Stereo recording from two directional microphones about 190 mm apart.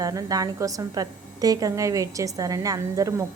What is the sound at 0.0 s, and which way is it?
A woman's voice, 20° right (ahead or behind).